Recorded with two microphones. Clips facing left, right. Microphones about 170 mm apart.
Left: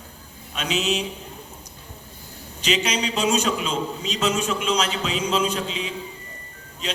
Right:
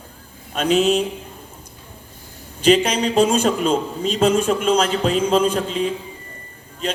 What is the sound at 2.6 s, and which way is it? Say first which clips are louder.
Speech: right 8 dB; 50° right (ahead or behind).